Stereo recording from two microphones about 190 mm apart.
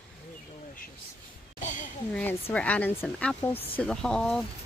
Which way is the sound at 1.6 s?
40° left (ahead or behind).